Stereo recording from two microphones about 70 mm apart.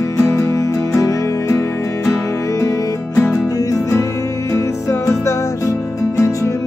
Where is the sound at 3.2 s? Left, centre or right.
Left.